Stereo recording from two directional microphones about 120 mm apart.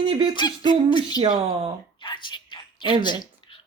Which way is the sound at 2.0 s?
40° left (ahead or behind).